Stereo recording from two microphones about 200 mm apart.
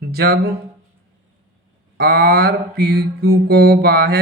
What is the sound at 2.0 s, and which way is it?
Mantra, 50° right (ahead or behind).